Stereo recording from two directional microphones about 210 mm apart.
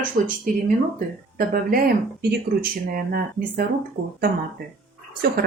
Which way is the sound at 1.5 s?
45° right (ahead or behind).